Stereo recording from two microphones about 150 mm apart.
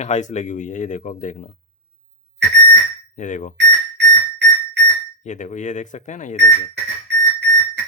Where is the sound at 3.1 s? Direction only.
55° left (ahead or behind).